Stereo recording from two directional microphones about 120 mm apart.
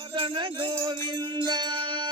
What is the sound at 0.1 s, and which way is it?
Music, 40° right (ahead or behind).